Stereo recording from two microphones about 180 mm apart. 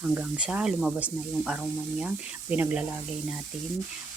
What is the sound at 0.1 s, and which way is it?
Speech, 5° right (ahead or behind).